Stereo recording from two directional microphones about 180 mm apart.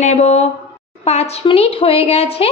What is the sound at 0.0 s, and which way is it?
Speech, 40° left (ahead or behind).